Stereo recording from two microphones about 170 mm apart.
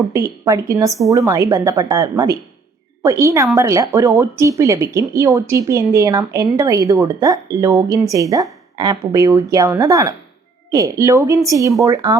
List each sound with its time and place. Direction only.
0.1 s speech: 15° right (ahead or behind)